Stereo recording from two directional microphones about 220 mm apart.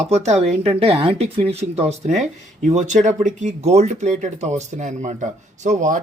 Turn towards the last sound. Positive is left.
turn(degrees=-35)  # may be behind; listen again after turning